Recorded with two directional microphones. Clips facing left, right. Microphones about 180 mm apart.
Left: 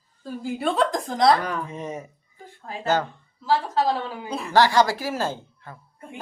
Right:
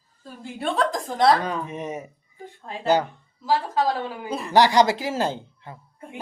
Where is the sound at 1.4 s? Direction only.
20° right (ahead or behind).